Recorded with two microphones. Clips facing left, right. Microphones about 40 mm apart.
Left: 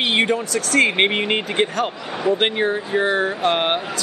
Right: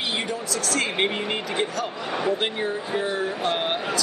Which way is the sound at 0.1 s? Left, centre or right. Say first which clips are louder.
Left 8 dB; left.